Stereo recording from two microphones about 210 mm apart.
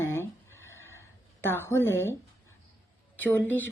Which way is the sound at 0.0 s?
10° left (ahead or behind).